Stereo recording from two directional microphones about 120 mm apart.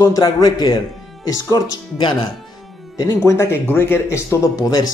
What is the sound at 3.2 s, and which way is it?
Speech, 20° left (ahead or behind).